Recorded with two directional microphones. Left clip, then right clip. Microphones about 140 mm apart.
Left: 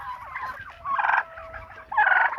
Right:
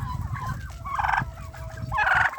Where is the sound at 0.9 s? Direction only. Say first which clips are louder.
Left 2 dB; 45° right (ahead or behind).